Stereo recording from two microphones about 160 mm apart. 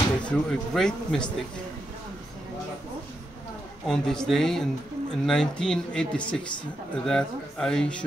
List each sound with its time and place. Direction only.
0.2 s speech: 5° left (ahead or behind)
3.8 s speech: 5° left (ahead or behind)